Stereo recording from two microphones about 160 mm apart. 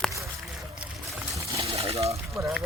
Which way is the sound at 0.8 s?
Centre (ahead or behind).